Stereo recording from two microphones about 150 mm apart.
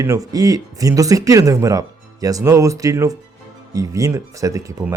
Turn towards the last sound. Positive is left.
turn(degrees=-20)  # may be behind; listen again after turning